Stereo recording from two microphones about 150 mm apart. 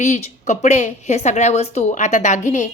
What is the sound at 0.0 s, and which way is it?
Speech, 50° left (ahead or behind).